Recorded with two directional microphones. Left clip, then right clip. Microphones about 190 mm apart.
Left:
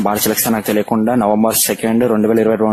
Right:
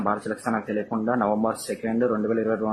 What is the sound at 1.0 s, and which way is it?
Speech, 40° left (ahead or behind).